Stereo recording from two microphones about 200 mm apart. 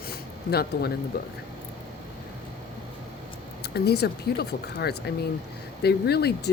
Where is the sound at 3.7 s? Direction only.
55° left (ahead or behind).